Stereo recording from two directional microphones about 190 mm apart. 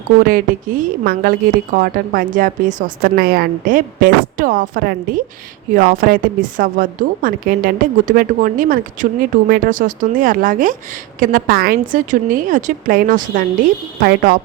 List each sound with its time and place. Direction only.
0.3 s a woman's voice: 45° right (ahead or behind)
14.0 s speech: 55° right (ahead or behind)